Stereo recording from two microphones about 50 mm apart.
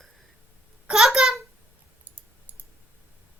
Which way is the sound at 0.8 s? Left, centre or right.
Centre.